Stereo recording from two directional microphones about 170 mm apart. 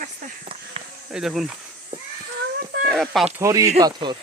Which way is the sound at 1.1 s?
5° right (ahead or behind).